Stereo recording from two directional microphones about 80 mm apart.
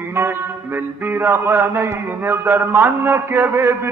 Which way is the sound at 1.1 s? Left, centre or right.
Right.